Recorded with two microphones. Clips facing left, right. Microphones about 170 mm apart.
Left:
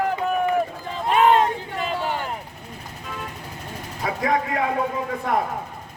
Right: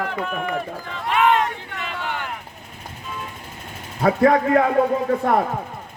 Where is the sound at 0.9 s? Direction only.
35° left (ahead or behind).